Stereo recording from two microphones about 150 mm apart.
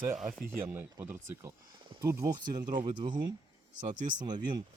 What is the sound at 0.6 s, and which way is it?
Speech, 15° right (ahead or behind).